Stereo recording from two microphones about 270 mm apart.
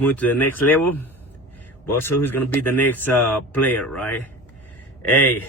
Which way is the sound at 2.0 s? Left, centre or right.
Centre.